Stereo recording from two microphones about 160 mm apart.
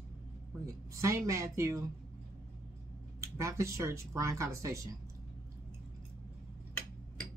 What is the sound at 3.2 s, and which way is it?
Speech, 20° right (ahead or behind).